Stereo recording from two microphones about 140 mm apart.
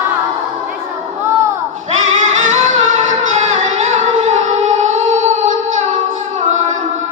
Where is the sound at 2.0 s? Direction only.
60° right (ahead or behind).